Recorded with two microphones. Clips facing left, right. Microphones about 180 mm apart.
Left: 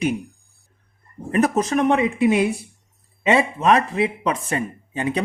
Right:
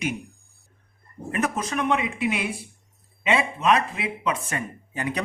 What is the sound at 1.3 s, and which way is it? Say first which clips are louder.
Speech: left 8 dB; 35° left (ahead or behind).